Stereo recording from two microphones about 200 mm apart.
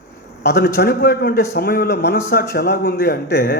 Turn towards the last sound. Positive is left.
turn(degrees=55)  # may be behind; listen again after turning